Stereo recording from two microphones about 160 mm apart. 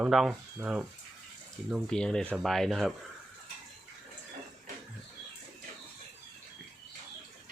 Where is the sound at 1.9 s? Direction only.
5° left (ahead or behind).